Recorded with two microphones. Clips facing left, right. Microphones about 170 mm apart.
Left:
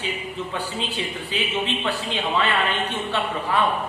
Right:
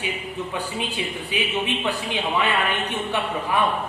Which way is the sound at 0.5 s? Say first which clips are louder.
Even; 15° right (ahead or behind).